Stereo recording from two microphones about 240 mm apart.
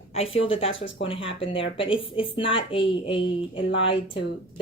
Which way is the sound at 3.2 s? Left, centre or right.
Left.